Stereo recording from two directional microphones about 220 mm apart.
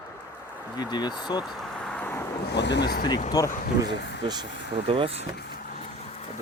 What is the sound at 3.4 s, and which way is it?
Speech, 15° left (ahead or behind).